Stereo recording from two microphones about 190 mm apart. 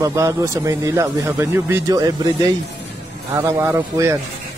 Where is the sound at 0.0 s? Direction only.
15° right (ahead or behind).